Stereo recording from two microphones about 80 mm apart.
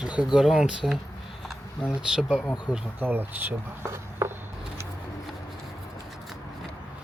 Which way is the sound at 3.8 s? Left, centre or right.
Right.